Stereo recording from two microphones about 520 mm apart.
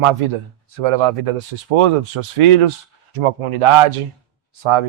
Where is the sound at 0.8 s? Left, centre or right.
Right.